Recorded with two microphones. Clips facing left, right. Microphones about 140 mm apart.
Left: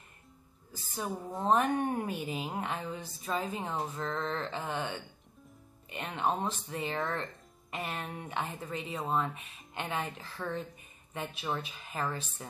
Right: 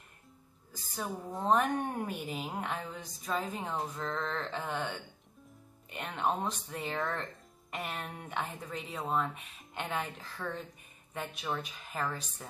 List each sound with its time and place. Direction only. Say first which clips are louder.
0.9 s a woman's voice: left 1 dB; centre (ahead or behind)